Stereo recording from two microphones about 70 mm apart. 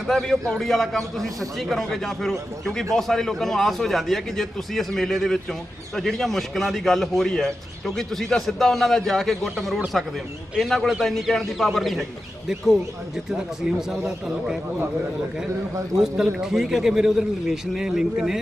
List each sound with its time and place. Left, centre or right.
0.1 s a man's voice: centre
13.3 s a man's voice: centre
16.0 s a man's voice: centre